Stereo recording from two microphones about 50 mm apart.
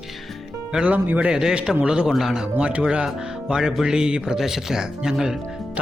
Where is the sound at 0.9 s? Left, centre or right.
Right.